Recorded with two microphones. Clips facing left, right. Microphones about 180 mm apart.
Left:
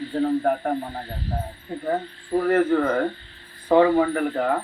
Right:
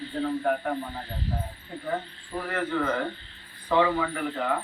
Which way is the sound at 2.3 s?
45° left (ahead or behind).